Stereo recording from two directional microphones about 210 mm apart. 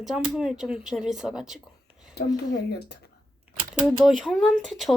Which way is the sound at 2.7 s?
50° left (ahead or behind).